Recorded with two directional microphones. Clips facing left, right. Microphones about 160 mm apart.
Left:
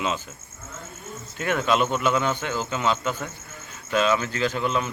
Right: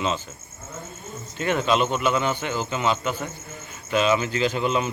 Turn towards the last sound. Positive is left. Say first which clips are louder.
# right 2 dB
turn(degrees=-20)  # may be behind; listen again after turning